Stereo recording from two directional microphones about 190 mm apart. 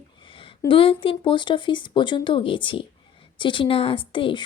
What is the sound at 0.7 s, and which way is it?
Speech, 25° left (ahead or behind).